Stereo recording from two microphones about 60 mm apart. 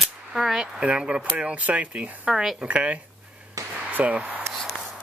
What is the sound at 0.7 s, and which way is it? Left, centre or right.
Speech, centre.